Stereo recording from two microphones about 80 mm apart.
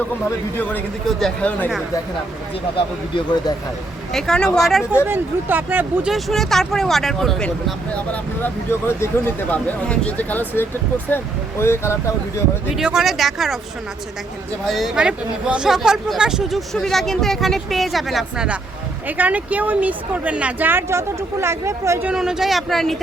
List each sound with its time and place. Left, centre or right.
1.2 s speech: centre
2.7 s speech: left
4.1 s speech: centre
5.0 s speech: right
6.1 s speech: centre
9.0 s speech: left
9.5 s speech: centre
12.7 s speech: centre
14.7 s speech: centre
19.0 s speech: right
22.1 s speech: centre